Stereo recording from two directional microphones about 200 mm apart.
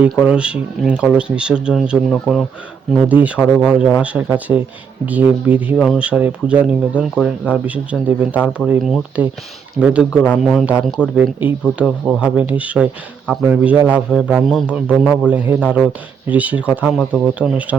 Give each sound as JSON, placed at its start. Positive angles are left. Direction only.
{"t": 0.0, "sound": "speech", "side_deg": -5}